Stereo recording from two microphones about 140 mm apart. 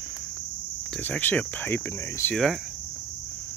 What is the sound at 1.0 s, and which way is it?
Speech, 10° left (ahead or behind).